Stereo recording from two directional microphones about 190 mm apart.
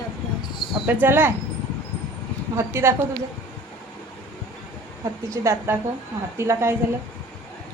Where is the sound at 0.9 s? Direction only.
10° right (ahead or behind).